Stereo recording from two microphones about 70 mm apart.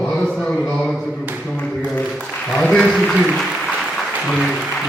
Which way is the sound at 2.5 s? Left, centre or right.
Centre.